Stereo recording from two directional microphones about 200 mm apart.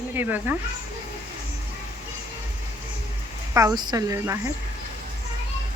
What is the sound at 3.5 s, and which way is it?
Speech, 15° right (ahead or behind).